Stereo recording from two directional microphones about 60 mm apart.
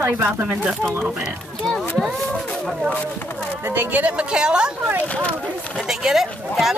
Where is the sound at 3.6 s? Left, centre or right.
Right; by 4.9 s centre.